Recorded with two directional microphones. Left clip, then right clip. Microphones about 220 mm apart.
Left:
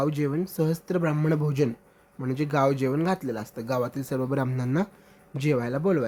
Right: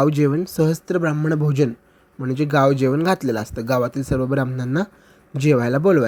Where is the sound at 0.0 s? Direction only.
25° right (ahead or behind).